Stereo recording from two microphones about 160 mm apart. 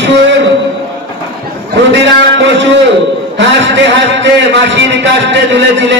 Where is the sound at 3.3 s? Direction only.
90° right.